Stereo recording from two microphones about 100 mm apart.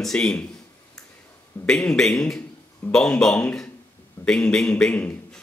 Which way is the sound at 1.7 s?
10° left (ahead or behind).